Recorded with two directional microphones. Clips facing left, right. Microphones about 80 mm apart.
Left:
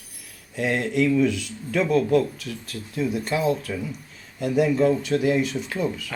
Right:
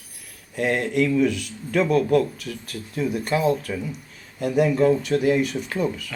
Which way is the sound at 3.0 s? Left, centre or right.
Right.